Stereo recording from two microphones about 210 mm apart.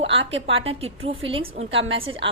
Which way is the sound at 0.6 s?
30° right (ahead or behind).